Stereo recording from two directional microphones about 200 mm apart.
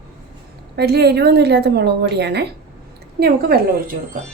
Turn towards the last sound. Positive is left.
turn(degrees=-50)  # may be behind; listen again after turning